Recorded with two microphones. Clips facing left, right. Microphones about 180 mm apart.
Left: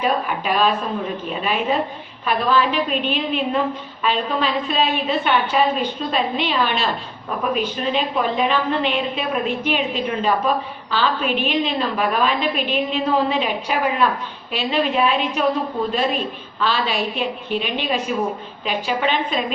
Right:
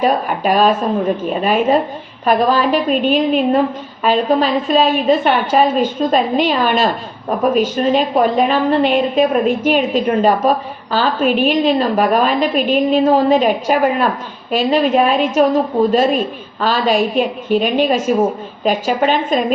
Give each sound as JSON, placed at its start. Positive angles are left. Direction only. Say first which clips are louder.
{"t": 0.0, "sound": "a woman's voice", "louder": "right 6 dB", "side_deg": -45}